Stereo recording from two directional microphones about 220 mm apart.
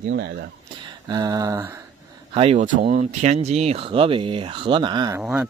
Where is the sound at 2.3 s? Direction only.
25° right (ahead or behind).